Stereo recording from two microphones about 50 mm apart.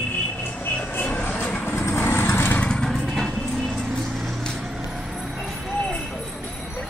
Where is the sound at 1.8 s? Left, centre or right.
Left.